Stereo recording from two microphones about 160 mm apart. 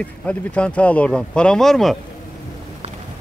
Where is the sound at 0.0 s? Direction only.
10° left (ahead or behind).